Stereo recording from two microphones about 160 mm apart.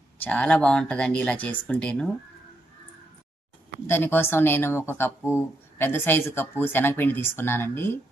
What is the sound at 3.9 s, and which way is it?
Speech, 15° left (ahead or behind).